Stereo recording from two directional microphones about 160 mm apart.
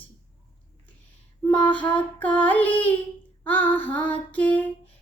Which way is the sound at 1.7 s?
10° left (ahead or behind).